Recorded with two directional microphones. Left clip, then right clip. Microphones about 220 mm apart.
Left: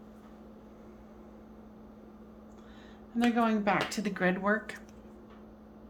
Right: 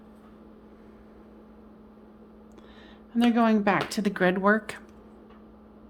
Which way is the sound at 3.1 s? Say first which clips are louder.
Right 5 dB; 50° right (ahead or behind).